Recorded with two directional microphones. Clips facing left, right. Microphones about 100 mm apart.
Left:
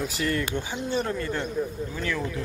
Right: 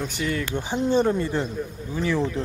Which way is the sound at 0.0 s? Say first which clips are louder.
Even; centre (ahead or behind).